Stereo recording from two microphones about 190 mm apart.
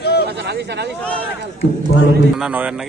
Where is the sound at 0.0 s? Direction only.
60° left (ahead or behind).